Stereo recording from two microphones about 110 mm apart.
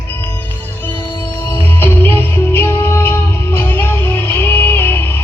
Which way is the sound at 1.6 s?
20° left (ahead or behind).